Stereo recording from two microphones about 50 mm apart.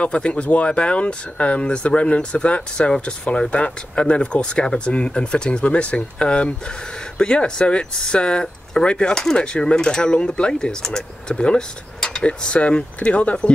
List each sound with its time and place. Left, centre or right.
0.0 s speech: left